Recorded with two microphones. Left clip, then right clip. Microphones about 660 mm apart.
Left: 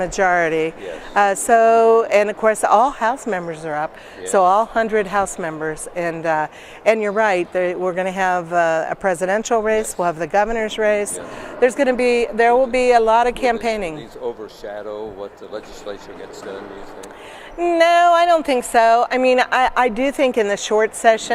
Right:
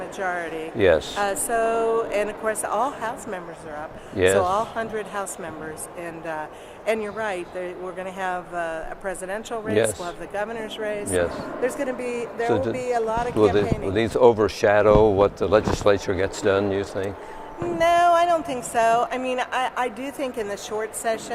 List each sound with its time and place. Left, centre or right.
0.2 s speech: left
14.0 s speech: right
17.7 s a woman's voice: left